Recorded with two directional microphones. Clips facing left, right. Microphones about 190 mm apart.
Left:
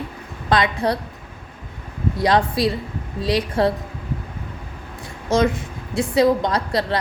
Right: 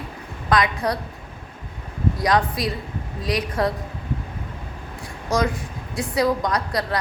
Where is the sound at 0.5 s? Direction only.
30° left (ahead or behind).